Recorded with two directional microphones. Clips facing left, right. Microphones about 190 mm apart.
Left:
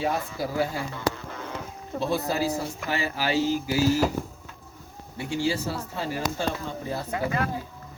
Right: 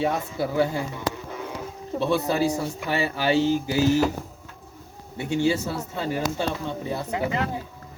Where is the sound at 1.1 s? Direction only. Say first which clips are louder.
Right 3 dB; 15° right (ahead or behind).